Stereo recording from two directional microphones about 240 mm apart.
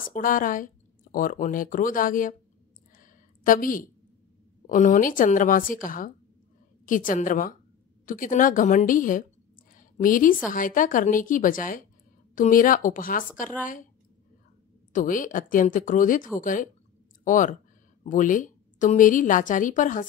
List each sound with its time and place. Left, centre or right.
0.0 s a woman's voice: left
3.0 s a sound: left
4.6 s a woman's voice: left
14.9 s a woman's voice: left